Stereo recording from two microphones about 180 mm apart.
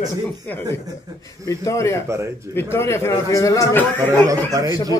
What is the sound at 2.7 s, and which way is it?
A man's voice, 15° left (ahead or behind).